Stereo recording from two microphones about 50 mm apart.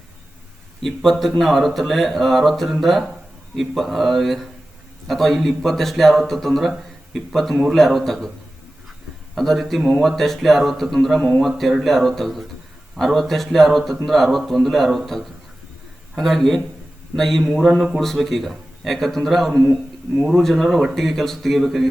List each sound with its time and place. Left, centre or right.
0.8 s speech: centre
9.3 s speech: centre